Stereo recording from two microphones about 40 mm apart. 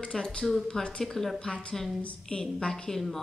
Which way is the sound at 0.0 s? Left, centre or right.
Left.